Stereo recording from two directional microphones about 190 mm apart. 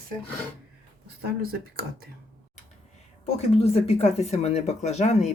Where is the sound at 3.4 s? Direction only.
35° left (ahead or behind).